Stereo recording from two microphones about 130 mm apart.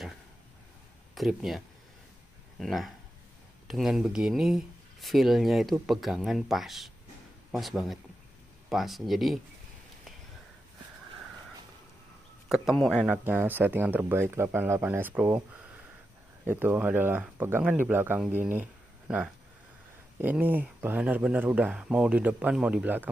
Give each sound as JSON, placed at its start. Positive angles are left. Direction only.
{"t": 1.1, "sound": "speech", "side_deg": 0}
{"t": 2.6, "sound": "speech", "side_deg": 0}
{"t": 12.4, "sound": "speech", "side_deg": 0}
{"t": 13.1, "sound": "speech", "side_deg": -15}
{"t": 16.4, "sound": "speech", "side_deg": -15}